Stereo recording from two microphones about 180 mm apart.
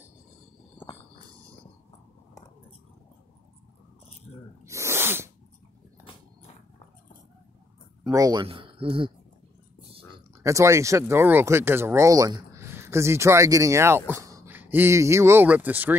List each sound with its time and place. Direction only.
4.6 s sneeze: 15° right (ahead or behind)
8.0 s speech: 20° right (ahead or behind)
10.4 s speech: 15° right (ahead or behind)